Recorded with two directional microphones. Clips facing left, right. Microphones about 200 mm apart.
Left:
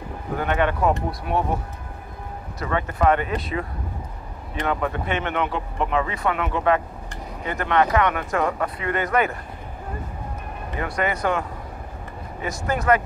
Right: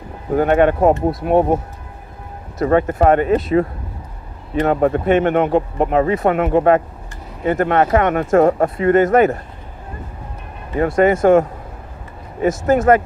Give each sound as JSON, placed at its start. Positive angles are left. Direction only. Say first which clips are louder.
{"t": 0.4, "sound": "speech", "louder": "right 9 dB", "side_deg": -45}
{"t": 2.6, "sound": "speech", "louder": "right 8 dB", "side_deg": -45}
{"t": 11.0, "sound": "speech", "louder": "right 12 dB", "side_deg": -45}